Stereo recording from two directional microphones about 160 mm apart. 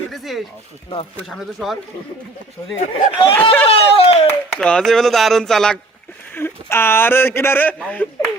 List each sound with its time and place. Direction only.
0.1 s speech: centre (ahead or behind)
2.6 s speech: 10° left (ahead or behind)
3.7 s a sound: 40° left (ahead or behind)
4.3 s speech: 10° left (ahead or behind)
6.3 s a man's voice: 15° left (ahead or behind)